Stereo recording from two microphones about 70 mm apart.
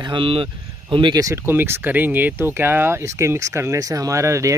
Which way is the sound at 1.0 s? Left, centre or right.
Right.